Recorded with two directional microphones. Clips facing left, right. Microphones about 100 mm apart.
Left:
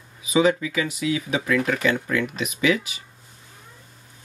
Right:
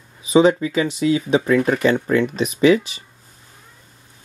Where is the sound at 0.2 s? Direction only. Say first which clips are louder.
Right 5 dB; 35° right (ahead or behind).